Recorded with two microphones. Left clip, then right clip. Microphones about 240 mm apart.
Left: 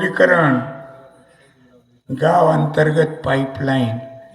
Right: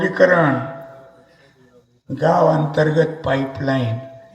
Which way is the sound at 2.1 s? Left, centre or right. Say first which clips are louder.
Left 1 dB; left.